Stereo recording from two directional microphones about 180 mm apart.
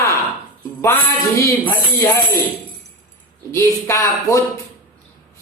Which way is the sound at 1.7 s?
15° left (ahead or behind).